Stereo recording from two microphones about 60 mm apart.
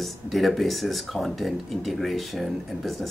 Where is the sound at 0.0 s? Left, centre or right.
Centre.